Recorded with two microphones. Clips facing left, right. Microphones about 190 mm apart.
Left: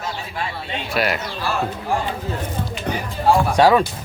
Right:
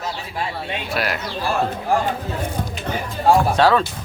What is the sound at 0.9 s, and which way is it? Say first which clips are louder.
Speech: left 4 dB; centre (ahead or behind).